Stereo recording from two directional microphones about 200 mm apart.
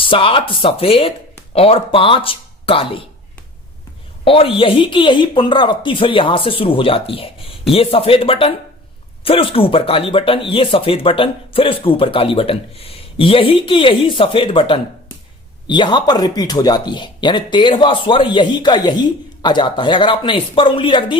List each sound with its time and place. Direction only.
0.0 s speech: 25° left (ahead or behind)
4.2 s speech: 25° left (ahead or behind)